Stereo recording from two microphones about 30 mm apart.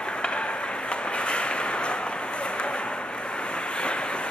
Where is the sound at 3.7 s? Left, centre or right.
Left.